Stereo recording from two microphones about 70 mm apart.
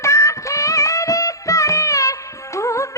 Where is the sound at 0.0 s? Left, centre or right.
Left.